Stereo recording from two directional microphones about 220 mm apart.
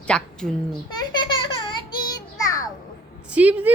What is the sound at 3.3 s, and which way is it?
Speech, 5° right (ahead or behind).